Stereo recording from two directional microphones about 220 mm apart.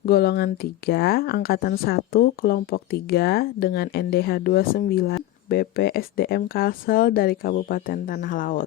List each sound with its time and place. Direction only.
0.0 s speech: 45° left (ahead or behind)